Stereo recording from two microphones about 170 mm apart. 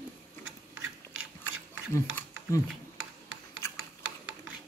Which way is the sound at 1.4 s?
15° left (ahead or behind).